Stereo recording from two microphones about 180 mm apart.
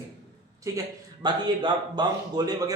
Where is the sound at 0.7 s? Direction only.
15° right (ahead or behind).